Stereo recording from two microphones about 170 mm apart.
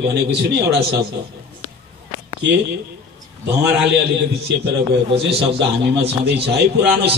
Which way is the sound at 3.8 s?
80° right.